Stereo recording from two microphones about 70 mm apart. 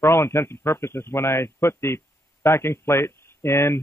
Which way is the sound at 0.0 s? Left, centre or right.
Left.